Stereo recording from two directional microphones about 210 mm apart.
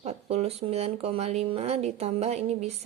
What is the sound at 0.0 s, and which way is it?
Speech, 30° right (ahead or behind).